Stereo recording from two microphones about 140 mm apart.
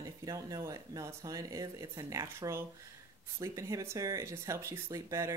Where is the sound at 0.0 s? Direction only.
25° right (ahead or behind).